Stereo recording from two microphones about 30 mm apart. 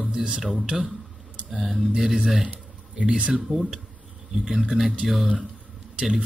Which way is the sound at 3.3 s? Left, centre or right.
Centre.